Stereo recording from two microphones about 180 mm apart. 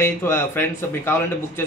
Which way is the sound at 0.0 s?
15° left (ahead or behind).